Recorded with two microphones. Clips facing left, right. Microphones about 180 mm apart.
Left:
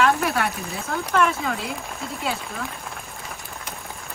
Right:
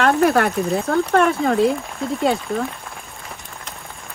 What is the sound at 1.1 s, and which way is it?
Speech, 40° right (ahead or behind).